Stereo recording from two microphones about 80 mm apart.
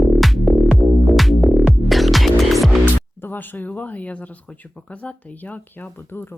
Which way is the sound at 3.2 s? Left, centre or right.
Left.